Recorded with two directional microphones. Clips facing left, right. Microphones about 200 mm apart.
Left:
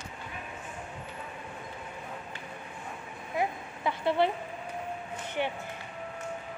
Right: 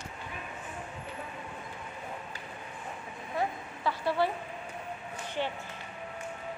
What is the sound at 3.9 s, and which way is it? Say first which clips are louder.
Speech: left 2 dB; 20° left (ahead or behind).